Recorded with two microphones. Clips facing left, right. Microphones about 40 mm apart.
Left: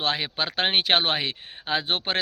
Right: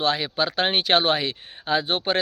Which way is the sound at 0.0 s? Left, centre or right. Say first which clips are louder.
Right 3 dB; left.